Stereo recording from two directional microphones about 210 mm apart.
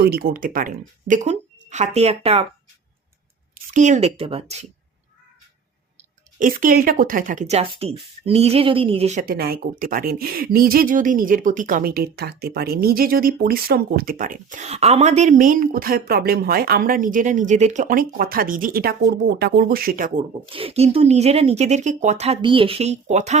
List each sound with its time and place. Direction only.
0.0 s speech: 45° right (ahead or behind); by 2.5 s 30° right (ahead or behind)
3.5 s speech: 35° right (ahead or behind)
6.4 s speech: 40° right (ahead or behind)
20.5 s speech: 25° right (ahead or behind)